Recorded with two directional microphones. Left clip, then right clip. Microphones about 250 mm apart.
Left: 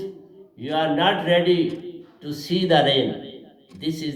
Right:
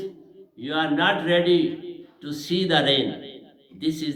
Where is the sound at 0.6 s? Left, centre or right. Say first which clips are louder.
Left 2 dB; right.